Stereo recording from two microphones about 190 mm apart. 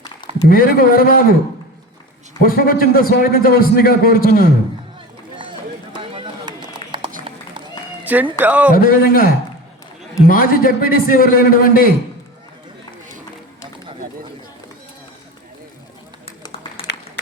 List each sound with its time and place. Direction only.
0.4 s a man's voice: 50° left (ahead or behind)
2.4 s a man's voice: 50° left (ahead or behind)
5.4 s run: 25° right (ahead or behind)
8.0 s speech: 10° right (ahead or behind)
8.7 s a man's voice: 50° left (ahead or behind)
16.2 s run: 30° left (ahead or behind)